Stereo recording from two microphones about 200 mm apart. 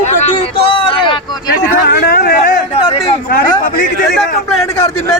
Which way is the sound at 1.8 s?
55° left (ahead or behind).